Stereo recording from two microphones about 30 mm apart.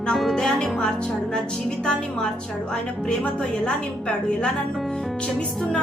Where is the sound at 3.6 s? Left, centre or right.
Left.